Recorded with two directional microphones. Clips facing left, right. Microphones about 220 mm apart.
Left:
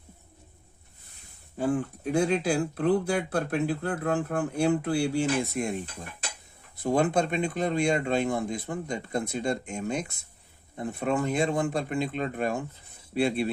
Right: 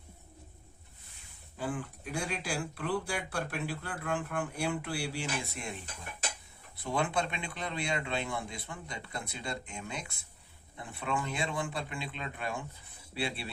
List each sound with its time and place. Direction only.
1.5 s speech: 45° left (ahead or behind)
6.8 s speech: 45° left (ahead or behind)